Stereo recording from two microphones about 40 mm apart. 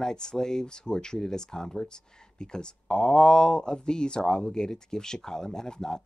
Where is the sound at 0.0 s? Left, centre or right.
Centre.